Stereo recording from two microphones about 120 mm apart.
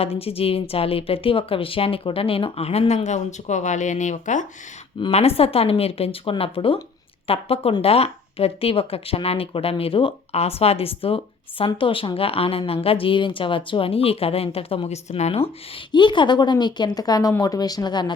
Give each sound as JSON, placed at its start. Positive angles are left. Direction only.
{"t": 0.0, "sound": "speech", "side_deg": 55}
{"t": 5.1, "sound": "speech", "side_deg": 55}
{"t": 15.9, "sound": "speech", "side_deg": 40}